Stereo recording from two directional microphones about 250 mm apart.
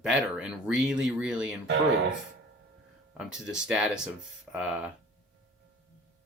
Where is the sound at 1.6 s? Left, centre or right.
Right.